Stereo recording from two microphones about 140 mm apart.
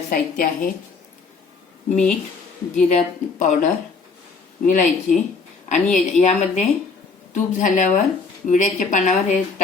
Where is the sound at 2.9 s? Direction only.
55° left (ahead or behind).